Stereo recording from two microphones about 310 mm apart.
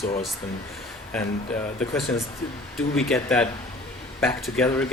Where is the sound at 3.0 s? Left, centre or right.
Centre.